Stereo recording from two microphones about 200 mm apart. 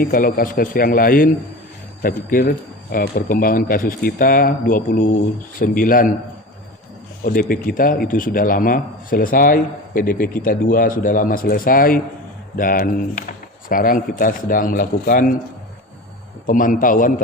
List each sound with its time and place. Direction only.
0.0 s a man's voice: 45° left (ahead or behind)
7.3 s a man's voice: 45° left (ahead or behind)
16.5 s a man's voice: 40° left (ahead or behind)